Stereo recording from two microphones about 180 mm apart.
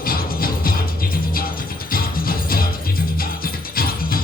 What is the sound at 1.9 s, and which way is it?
Music, 55° left (ahead or behind).